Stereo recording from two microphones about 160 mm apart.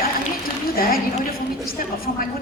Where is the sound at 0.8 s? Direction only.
65° left (ahead or behind).